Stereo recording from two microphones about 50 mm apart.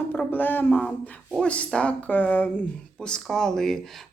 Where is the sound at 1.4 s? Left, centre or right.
Left.